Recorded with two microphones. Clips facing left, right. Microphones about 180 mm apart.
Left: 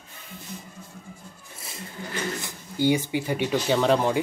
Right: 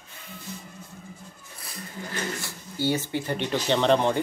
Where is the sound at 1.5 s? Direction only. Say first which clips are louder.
Even; 25° left (ahead or behind).